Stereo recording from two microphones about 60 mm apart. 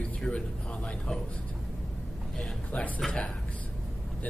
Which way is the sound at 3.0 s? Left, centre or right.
Centre.